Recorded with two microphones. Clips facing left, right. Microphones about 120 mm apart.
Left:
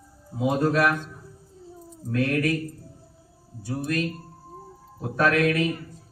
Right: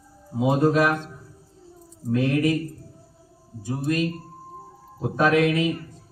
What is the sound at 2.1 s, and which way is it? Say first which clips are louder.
Speech: right 3 dB; 20° right (ahead or behind).